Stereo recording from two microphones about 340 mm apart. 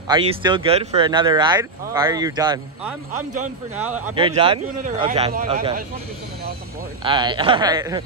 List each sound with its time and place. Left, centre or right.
0.1 s speech: centre
7.0 s speech: centre